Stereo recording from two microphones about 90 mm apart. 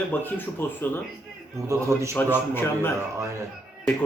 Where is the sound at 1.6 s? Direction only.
30° right (ahead or behind).